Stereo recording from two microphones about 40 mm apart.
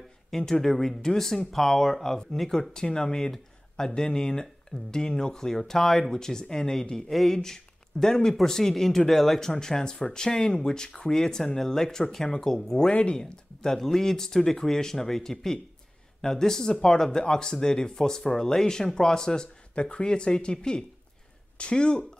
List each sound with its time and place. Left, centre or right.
0.4 s speech: centre
2.7 s speech: centre
7.1 s speech: centre
7.3 s speech: centre
9.5 s speech: centre